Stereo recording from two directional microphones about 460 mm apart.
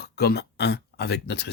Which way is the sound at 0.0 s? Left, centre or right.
Left.